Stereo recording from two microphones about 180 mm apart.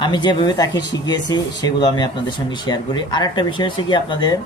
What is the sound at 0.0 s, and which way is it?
Speech, 25° left (ahead or behind).